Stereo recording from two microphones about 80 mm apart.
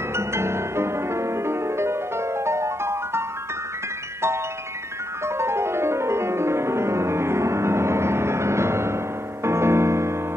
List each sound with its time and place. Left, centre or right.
0.1 s music: right
5.2 s music: right